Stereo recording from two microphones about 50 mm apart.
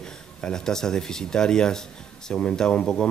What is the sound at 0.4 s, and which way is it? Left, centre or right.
Speech, centre.